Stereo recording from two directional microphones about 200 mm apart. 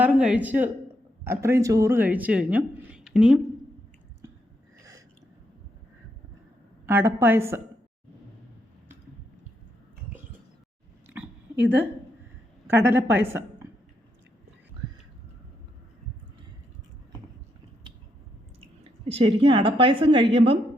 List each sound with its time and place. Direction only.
0.0 s a woman's voice: 5° right (ahead or behind)
4.8 s a sound: 15° right (ahead or behind)
6.8 s a woman's voice: 10° right (ahead or behind)
11.0 s a sound: 10° right (ahead or behind)
11.5 s a woman's voice: 60° right (ahead or behind)
12.6 s a woman's voice: 10° right (ahead or behind)
19.0 s a woman's voice: 25° right (ahead or behind)